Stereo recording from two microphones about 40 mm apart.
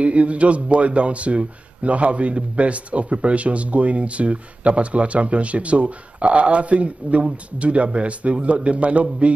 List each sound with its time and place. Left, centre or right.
0.0 s speech: right